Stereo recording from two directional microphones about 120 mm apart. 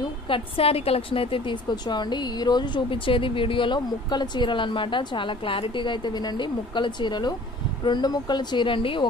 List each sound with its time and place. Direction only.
0.3 s a woman's voice: 55° left (ahead or behind)